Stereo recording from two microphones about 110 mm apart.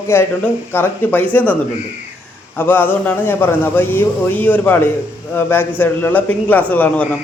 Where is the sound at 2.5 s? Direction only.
20° left (ahead or behind).